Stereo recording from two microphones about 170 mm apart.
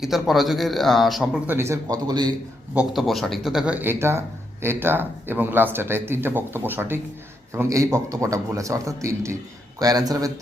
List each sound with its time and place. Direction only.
0.0 s speech: centre (ahead or behind)
1.5 s speech: 15° right (ahead or behind)
2.7 s speech: centre (ahead or behind); by 10.3 s 20° right (ahead or behind)